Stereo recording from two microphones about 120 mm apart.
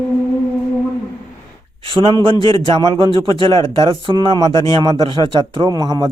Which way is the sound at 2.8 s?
35° right (ahead or behind).